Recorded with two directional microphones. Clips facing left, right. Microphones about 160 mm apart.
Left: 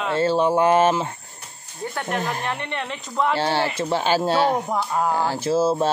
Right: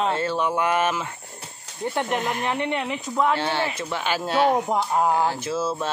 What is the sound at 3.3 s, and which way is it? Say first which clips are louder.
Speech: left 3 dB; 35° left (ahead or behind).